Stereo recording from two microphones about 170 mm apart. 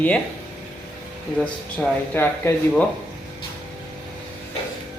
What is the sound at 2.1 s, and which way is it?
Speech, 15° left (ahead or behind).